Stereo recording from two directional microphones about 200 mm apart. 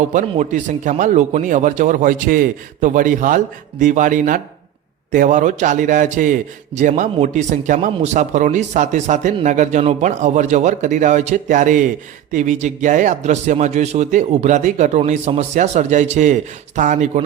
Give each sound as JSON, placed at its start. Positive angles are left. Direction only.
{"t": 0.1, "sound": "a man's voice", "side_deg": -40}